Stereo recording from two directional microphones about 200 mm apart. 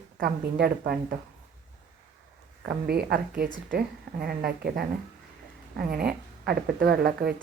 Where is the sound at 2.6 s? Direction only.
50° right (ahead or behind).